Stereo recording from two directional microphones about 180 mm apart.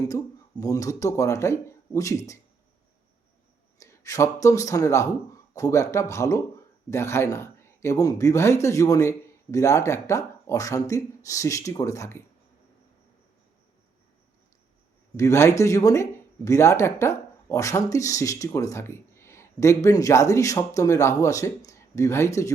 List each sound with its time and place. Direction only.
0.6 s speech: 20° left (ahead or behind)
3.8 s speech: 15° left (ahead or behind)
15.1 s speech: 15° left (ahead or behind)